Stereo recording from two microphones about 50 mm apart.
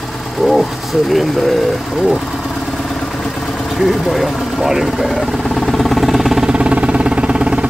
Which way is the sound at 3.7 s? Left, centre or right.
Centre.